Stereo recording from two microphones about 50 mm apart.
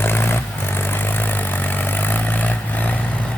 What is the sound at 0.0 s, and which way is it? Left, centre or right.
Vehicle, left.